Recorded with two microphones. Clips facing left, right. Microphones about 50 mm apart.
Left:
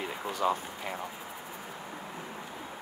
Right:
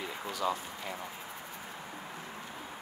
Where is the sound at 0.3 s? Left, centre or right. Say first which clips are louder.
Left 4 dB; left.